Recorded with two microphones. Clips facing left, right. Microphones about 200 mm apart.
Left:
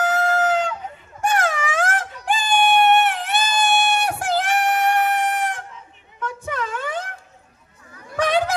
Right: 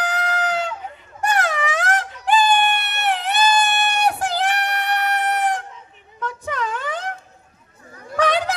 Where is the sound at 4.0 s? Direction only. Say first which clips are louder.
Right 1 dB; 45° left (ahead or behind).